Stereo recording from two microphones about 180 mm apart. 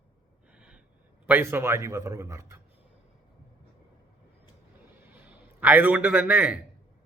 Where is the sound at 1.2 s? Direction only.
10° right (ahead or behind).